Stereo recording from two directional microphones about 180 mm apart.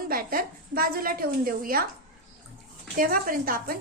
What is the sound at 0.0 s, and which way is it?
A woman's voice, 55° right (ahead or behind).